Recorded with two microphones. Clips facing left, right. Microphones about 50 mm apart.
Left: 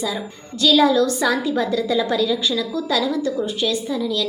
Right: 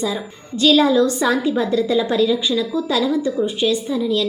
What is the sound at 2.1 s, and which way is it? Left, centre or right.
A woman's voice, centre.